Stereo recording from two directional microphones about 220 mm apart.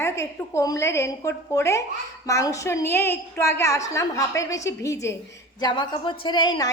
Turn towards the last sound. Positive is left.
turn(degrees=20)  # may be behind; listen again after turning